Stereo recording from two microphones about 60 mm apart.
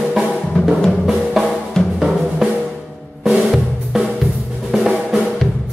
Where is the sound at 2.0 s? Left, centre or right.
Centre.